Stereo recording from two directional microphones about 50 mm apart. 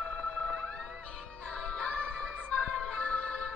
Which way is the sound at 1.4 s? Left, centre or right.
Left.